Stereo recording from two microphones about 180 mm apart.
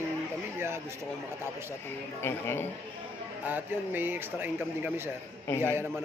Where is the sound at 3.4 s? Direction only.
10° right (ahead or behind).